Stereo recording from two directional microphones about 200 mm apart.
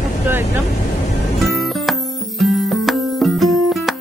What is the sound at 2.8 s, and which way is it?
Music, centre (ahead or behind).